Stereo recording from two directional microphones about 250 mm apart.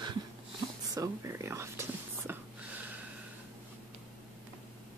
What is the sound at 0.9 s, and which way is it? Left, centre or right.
Whispering, centre.